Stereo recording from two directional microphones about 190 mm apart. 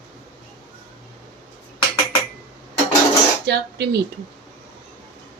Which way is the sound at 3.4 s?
60° right (ahead or behind).